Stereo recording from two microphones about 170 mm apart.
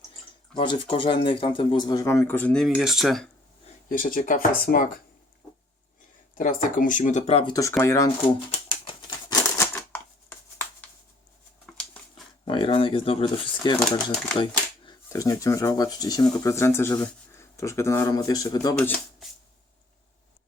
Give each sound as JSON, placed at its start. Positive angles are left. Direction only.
{"t": 0.5, "sound": "speech", "side_deg": 30}
{"t": 3.8, "sound": "speech", "side_deg": 55}
{"t": 6.3, "sound": "speech", "side_deg": 50}
{"t": 7.5, "sound": "speech", "side_deg": 15}
{"t": 8.4, "sound": "typewriter", "side_deg": 35}
{"t": 11.6, "sound": "a sound", "side_deg": 0}
{"t": 12.5, "sound": "speech", "side_deg": 30}
{"t": 14.3, "sound": "typewriter", "side_deg": 30}
{"t": 15.1, "sound": "speech", "side_deg": 20}
{"t": 18.8, "sound": "shuffling cards", "side_deg": 5}